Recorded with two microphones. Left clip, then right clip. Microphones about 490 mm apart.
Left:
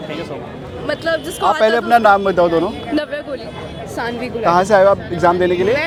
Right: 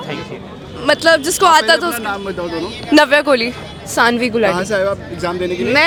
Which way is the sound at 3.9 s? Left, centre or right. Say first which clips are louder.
Right 10 dB; right.